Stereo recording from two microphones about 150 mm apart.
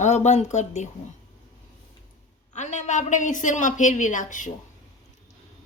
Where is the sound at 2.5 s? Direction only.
55° left (ahead or behind).